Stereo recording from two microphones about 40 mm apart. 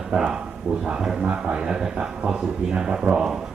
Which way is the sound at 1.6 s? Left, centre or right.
Centre.